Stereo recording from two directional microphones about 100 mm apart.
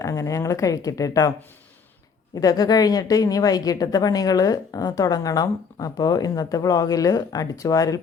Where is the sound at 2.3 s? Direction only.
40° left (ahead or behind).